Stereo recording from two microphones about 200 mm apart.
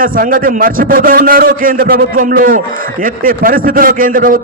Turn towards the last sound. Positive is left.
turn(degrees=-45)  # may be behind; listen again after turning